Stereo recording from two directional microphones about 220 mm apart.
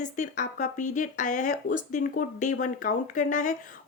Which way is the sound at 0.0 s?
35° left (ahead or behind).